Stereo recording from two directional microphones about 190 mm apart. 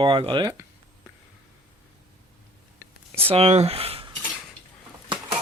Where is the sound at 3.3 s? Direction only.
35° right (ahead or behind).